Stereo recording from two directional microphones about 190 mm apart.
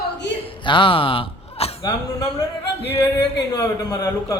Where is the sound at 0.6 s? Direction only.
25° left (ahead or behind).